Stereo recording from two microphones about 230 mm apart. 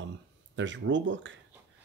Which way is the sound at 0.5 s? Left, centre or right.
Right.